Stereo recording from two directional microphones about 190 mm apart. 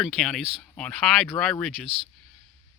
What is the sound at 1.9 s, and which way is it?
Speech, 25° right (ahead or behind).